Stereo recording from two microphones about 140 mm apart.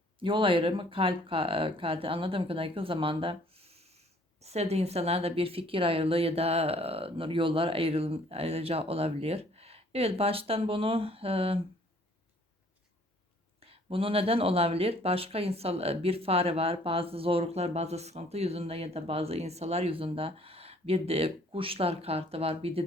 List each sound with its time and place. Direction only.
0.2 s speech: 40° right (ahead or behind)
13.6 s speech: 45° right (ahead or behind)